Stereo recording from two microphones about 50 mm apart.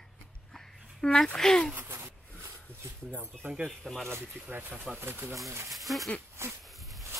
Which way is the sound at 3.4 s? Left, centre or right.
Right.